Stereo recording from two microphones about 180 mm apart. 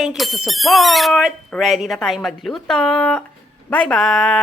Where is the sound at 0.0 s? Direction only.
Centre (ahead or behind).